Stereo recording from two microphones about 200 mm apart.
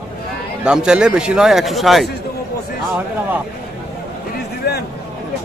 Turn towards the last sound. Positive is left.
turn(degrees=50)  # may be behind; listen again after turning